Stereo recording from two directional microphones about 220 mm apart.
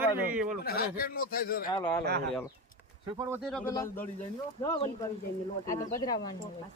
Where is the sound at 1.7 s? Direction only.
15° left (ahead or behind).